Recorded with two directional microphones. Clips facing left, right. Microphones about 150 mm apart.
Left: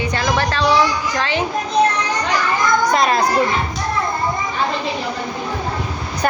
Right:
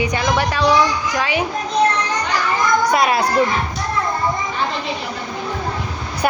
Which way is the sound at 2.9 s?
10° right (ahead or behind).